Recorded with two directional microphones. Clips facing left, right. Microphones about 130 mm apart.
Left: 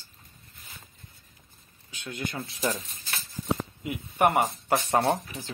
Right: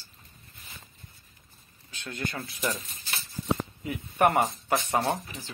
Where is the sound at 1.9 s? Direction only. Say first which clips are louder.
Left 1 dB; 15° left (ahead or behind).